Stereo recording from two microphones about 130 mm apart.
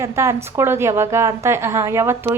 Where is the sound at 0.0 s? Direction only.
20° right (ahead or behind).